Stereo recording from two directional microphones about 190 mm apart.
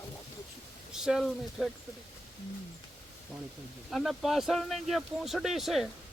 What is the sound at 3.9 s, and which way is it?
Speech, centre (ahead or behind).